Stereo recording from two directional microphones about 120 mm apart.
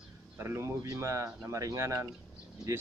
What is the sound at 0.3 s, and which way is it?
Speech, 20° right (ahead or behind).